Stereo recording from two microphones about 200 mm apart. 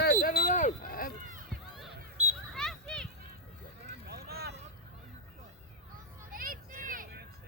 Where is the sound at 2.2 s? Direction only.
35° right (ahead or behind).